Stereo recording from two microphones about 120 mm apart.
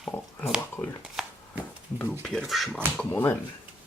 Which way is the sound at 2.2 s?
Centre (ahead or behind).